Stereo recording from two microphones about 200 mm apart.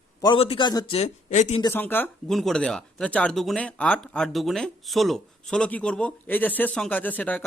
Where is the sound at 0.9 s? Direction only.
35° left (ahead or behind).